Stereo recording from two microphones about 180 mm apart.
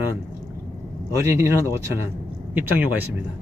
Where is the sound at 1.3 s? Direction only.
15° right (ahead or behind).